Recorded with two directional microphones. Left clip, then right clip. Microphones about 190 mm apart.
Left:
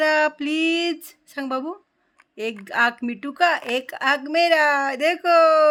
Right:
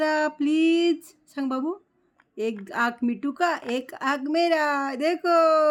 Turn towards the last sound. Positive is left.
turn(degrees=-5)  # may be behind; listen again after turning